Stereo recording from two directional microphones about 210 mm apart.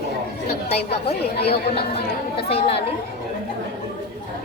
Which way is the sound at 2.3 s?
25° left (ahead or behind).